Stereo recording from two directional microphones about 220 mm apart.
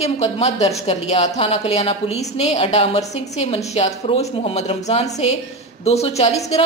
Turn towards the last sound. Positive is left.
turn(degrees=30)  # may be behind; listen again after turning